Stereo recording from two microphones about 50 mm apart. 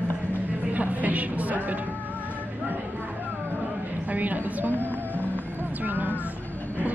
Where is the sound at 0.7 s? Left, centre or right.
Right.